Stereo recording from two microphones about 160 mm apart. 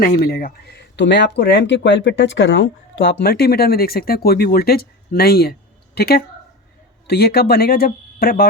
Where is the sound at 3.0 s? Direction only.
75° left (ahead or behind).